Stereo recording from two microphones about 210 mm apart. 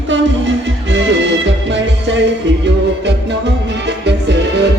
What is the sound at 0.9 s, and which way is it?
Music, 60° right (ahead or behind).